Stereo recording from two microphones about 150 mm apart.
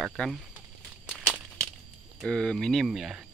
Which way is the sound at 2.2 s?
5° left (ahead or behind).